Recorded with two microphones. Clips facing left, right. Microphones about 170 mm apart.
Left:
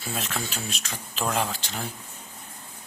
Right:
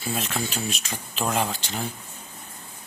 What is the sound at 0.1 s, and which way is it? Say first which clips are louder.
Speech: right 3 dB; centre (ahead or behind).